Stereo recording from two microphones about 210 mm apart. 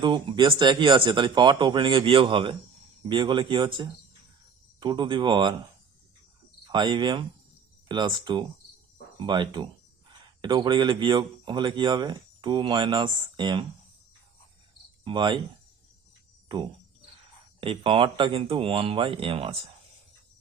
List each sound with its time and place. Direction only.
0.0 s speech: 20° right (ahead or behind)
6.7 s speech: 20° right (ahead or behind)
15.0 s speech: 20° right (ahead or behind)
17.6 s speech: 25° right (ahead or behind)